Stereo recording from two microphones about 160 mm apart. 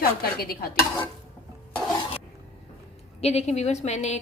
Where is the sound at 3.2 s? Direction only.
40° left (ahead or behind).